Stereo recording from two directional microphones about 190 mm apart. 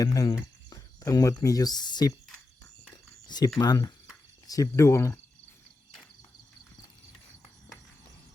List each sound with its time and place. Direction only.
0.0 s speech: 20° left (ahead or behind)
3.2 s speech: 20° left (ahead or behind)